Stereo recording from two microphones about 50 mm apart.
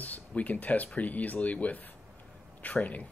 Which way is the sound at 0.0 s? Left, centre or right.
Left.